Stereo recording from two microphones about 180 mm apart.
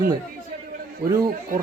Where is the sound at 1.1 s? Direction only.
25° right (ahead or behind).